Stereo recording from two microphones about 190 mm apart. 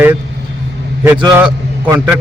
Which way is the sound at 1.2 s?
10° right (ahead or behind).